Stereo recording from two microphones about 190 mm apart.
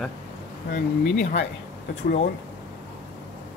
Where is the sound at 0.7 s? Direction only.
60° left (ahead or behind).